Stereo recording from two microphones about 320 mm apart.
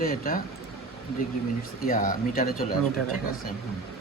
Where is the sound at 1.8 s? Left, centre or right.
Left.